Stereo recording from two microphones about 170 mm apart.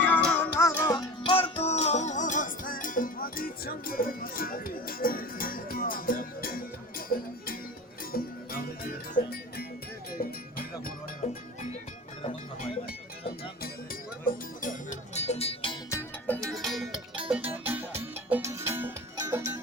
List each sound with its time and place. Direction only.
0.0 s music: 10° left (ahead or behind)
0.9 s music: 30° left (ahead or behind); by 10.3 s 60° left (ahead or behind)
14.3 s music: 50° left (ahead or behind); by 15.8 s 35° left (ahead or behind)
15.9 s music: 10° left (ahead or behind); by 19.5 s 20° right (ahead or behind)